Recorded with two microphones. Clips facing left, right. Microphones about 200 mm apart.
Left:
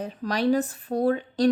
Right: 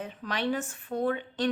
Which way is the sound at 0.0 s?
40° left (ahead or behind).